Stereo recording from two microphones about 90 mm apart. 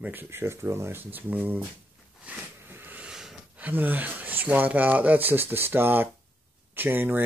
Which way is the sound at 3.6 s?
20° right (ahead or behind).